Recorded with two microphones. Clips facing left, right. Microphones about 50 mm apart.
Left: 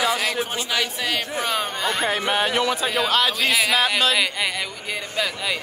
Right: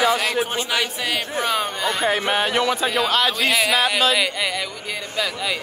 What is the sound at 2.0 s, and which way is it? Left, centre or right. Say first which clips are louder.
A man's voice: right 2 dB; centre.